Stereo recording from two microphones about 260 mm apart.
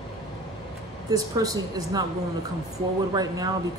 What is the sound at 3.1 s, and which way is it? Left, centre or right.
Speech, centre.